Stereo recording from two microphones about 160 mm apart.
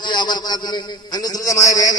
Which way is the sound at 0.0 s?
25° left (ahead or behind).